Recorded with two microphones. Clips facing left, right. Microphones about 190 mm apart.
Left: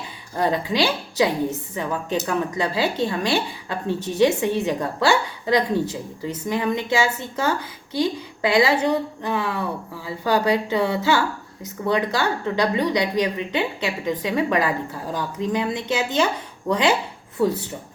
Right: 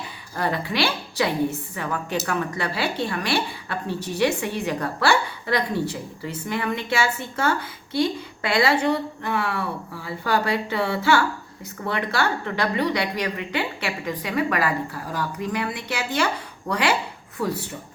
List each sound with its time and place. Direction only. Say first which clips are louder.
0.3 s a woman's voice: left 3 dB; 20° left (ahead or behind)